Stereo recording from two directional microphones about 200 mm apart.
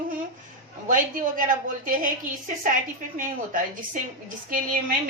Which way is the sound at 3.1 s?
40° right (ahead or behind).